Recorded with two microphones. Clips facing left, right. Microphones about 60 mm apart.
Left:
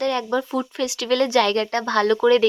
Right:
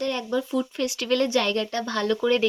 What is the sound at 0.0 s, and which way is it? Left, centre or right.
Speech, left.